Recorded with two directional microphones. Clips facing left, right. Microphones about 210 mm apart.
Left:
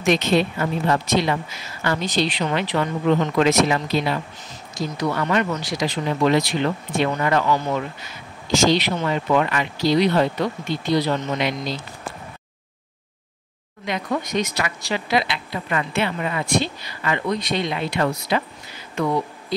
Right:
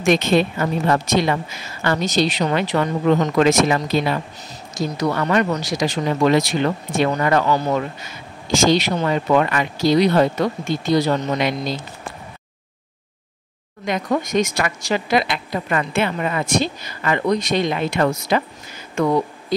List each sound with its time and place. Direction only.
0.0 s speech: 50° right (ahead or behind)
8.5 s speech: 50° right (ahead or behind)
13.8 s speech: 45° right (ahead or behind)